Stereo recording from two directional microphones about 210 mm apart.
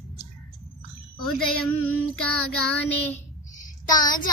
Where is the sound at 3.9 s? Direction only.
20° left (ahead or behind).